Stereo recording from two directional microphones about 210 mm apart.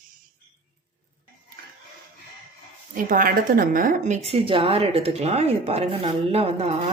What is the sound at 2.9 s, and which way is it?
A woman's voice, 40° right (ahead or behind).